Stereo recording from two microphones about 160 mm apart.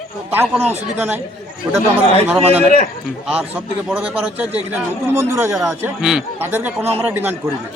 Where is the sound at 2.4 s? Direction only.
40° right (ahead or behind).